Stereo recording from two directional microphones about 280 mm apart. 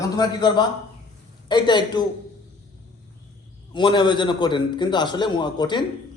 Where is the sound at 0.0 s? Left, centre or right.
Centre.